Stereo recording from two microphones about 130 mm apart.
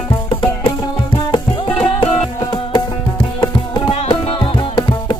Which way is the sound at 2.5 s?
35° left (ahead or behind).